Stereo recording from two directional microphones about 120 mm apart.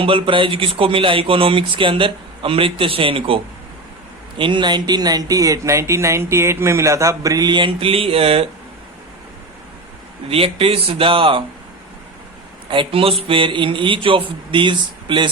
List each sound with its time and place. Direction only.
0.0 s speech: 45° right (ahead or behind)
10.2 s speech: 50° right (ahead or behind)
12.6 s speech: 45° right (ahead or behind)